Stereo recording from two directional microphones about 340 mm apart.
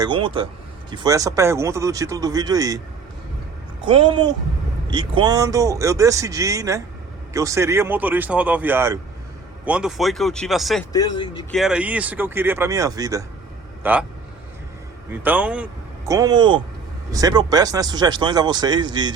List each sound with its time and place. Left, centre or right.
0.0 s speech: centre
3.8 s speech: centre
15.1 s speech: centre